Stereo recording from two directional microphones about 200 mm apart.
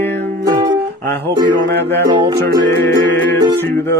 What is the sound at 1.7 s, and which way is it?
Music, 60° right (ahead or behind).